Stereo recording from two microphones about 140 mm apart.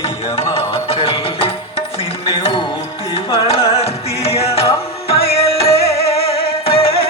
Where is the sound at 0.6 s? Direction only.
45° left (ahead or behind).